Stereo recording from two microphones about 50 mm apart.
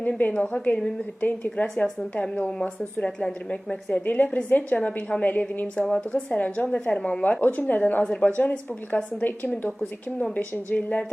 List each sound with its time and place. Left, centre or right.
0.0 s a woman's voice: left
1.6 s speech: centre
2.1 s a woman's voice: left
5.7 s a woman's voice: left
7.4 s a woman's voice: left
8.0 s a woman's voice: left
10.7 s a woman's voice: left